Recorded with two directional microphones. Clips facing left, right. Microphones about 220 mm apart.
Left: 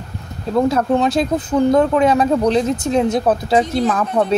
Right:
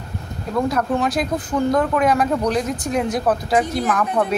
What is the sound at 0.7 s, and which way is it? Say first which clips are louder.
A woman's voice: left 4 dB; 25° left (ahead or behind).